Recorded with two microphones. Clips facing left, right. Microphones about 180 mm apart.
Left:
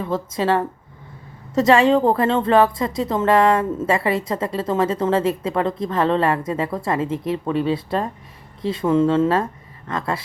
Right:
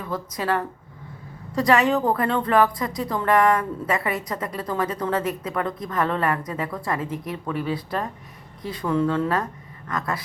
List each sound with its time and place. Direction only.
0.0 s a woman's voice: 25° left (ahead or behind)